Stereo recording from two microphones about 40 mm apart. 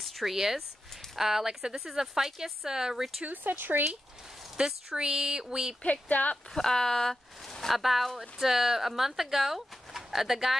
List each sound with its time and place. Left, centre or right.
0.0 s speech: centre
3.3 s speech: right
4.6 s speech: centre
5.9 s speech: left
6.5 s speech: centre
7.7 s speech: centre